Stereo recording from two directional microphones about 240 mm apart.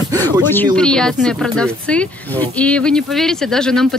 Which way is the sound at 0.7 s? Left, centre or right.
Centre.